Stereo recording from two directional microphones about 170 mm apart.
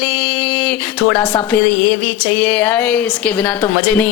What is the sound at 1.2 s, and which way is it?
Speech, 25° left (ahead or behind).